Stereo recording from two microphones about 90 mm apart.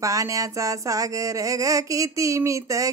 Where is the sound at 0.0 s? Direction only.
40° right (ahead or behind).